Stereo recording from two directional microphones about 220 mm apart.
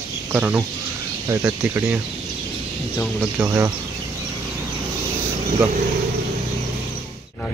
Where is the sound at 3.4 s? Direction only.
15° right (ahead or behind).